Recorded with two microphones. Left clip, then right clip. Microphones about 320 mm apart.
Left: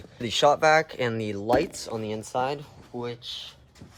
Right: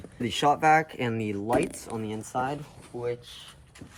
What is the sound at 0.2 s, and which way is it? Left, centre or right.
Speech, centre.